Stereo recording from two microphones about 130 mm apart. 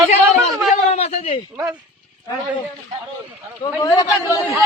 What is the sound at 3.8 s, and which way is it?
Speech, 25° left (ahead or behind).